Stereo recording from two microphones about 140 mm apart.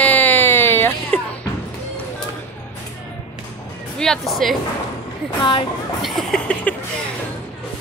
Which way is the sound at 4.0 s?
5° left (ahead or behind).